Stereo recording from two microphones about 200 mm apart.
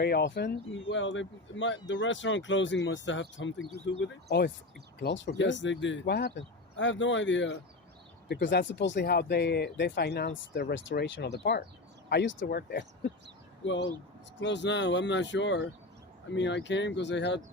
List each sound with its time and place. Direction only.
0.0 s speech: 55° left (ahead or behind)
14.3 s speech: 60° left (ahead or behind)